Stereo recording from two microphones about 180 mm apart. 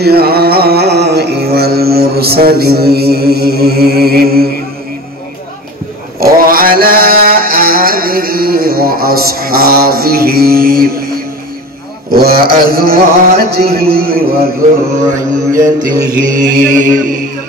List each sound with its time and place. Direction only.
0.0 s a sound: 60° right (ahead or behind)
6.1 s mantra: 55° right (ahead or behind)
15.1 s mantra: 20° right (ahead or behind)
16.4 s music: 45° right (ahead or behind)